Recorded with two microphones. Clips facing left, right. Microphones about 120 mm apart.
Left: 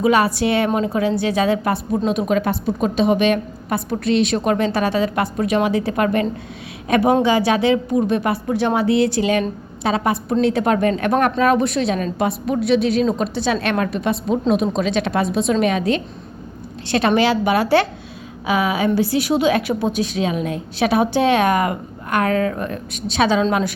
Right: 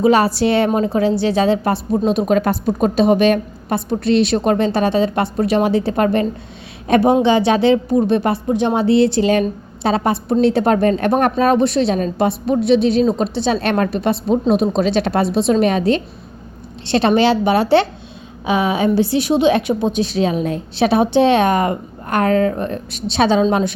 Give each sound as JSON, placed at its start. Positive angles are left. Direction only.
{"t": 0.0, "sound": "a woman's voice", "side_deg": -35}